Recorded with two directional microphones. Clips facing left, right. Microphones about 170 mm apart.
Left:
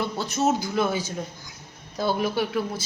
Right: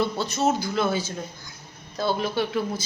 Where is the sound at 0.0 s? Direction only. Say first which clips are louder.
Right 1 dB; 15° left (ahead or behind).